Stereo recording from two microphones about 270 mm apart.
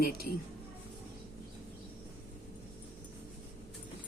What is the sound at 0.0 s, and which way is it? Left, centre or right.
Speech, left.